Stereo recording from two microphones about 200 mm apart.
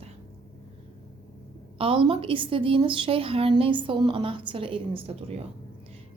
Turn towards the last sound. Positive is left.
turn(degrees=-30)  # may be behind; listen again after turning